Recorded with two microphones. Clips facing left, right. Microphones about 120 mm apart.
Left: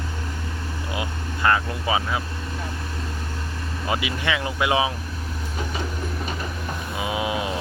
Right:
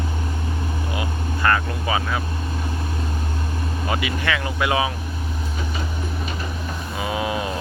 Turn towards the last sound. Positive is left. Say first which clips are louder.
# right 1 dB
turn(degrees=15)  # may be behind; listen again after turning